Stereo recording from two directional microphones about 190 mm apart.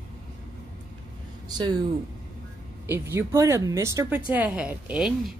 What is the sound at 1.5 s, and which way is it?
Speech, 20° right (ahead or behind).